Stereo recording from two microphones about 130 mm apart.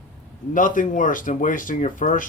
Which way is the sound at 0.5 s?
90° left.